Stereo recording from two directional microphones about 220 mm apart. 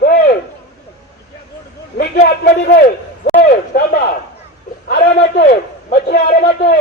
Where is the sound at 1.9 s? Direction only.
45° left (ahead or behind).